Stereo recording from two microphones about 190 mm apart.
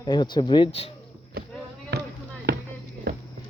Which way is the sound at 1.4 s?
55° right (ahead or behind).